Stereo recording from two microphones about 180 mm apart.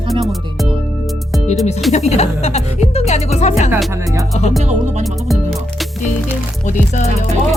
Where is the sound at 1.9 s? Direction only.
35° left (ahead or behind).